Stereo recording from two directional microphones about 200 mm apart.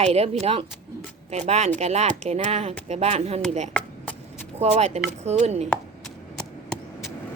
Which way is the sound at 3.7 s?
5° left (ahead or behind).